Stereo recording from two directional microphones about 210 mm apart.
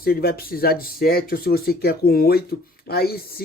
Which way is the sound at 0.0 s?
45° left (ahead or behind).